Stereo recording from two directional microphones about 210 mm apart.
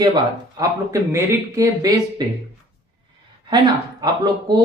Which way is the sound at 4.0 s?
20° right (ahead or behind).